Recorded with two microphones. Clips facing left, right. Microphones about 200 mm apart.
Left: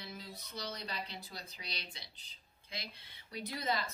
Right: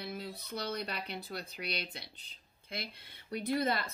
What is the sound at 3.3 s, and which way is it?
Speech, 55° right (ahead or behind).